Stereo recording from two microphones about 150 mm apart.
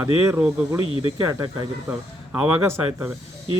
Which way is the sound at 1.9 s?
15° right (ahead or behind).